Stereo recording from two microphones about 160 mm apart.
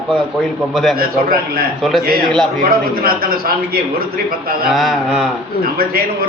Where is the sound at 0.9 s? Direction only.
70° right (ahead or behind).